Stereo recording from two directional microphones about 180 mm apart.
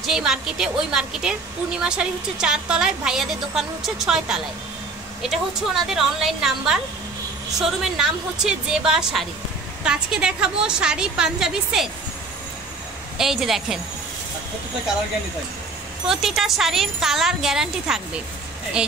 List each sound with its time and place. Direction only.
0.0 s a woman's voice: centre (ahead or behind)
13.2 s a woman's voice: centre (ahead or behind)
16.1 s a woman's voice: centre (ahead or behind)